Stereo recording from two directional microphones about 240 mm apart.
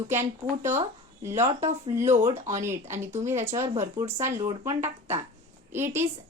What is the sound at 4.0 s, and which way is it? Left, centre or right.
Speech, centre.